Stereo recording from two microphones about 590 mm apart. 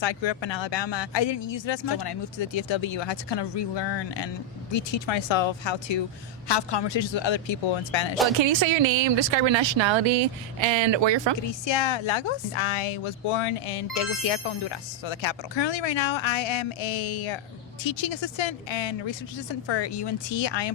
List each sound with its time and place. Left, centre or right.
0.0 s speech: left
8.4 s speech: right
11.6 s speech: left